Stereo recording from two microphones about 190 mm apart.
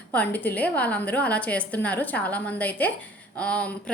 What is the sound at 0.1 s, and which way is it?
A woman's voice, 10° left (ahead or behind).